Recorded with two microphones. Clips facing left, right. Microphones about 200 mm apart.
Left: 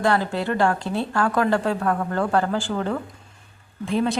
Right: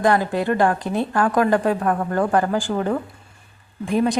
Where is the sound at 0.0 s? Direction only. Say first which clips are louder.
Right 3 dB; 15° right (ahead or behind).